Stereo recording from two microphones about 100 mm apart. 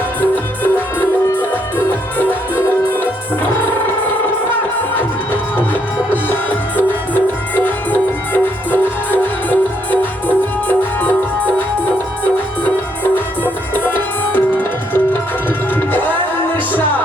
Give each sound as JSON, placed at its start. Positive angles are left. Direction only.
{"t": 0.2, "sound": "music", "side_deg": 20}
{"t": 4.9, "sound": "music", "side_deg": 20}
{"t": 13.4, "sound": "tabla", "side_deg": 20}